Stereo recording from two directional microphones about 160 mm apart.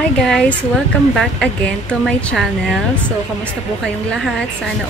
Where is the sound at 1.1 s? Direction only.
5° left (ahead or behind).